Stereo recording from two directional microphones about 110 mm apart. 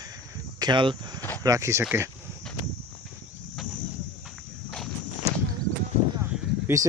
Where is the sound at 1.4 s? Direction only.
30° right (ahead or behind).